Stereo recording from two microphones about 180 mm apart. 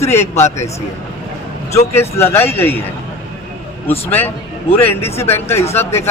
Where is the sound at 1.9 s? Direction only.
15° left (ahead or behind).